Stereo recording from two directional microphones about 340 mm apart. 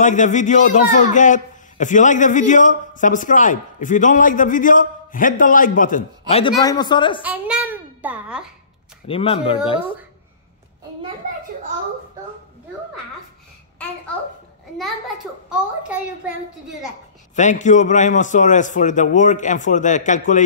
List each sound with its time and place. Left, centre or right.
0.0 s a man's voice: left
7.2 s a child's voice: centre
9.0 s speech: centre
17.4 s a man's voice: left